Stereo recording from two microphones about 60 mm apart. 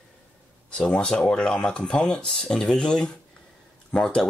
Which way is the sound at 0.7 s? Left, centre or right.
Centre.